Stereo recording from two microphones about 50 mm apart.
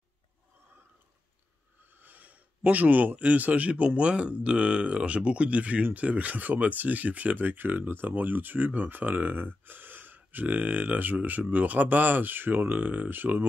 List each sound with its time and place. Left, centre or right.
1.8 s speech: right